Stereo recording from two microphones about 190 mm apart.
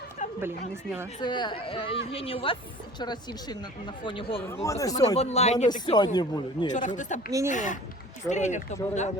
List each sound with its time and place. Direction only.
0.2 s a sound: 40° left (ahead or behind)
1.2 s speech: 25° left (ahead or behind)
4.6 s speech: 15° left (ahead or behind)
5.1 s speech: 35° left (ahead or behind)
5.8 s speech: 25° left (ahead or behind)
6.7 s speech: 40° left (ahead or behind)
7.3 s speech: 15° right (ahead or behind)
7.5 s speech: 40° left (ahead or behind)